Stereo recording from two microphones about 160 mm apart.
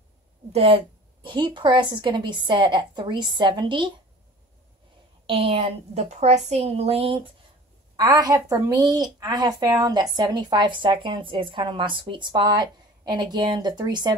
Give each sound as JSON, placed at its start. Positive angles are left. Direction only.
{"t": 0.5, "sound": "a woman's voice", "side_deg": -35}
{"t": 5.2, "sound": "a woman's voice", "side_deg": -35}
{"t": 7.9, "sound": "a woman's voice", "side_deg": -25}